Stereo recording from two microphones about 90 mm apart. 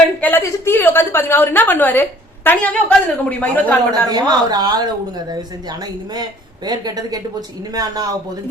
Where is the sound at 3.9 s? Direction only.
50° right (ahead or behind).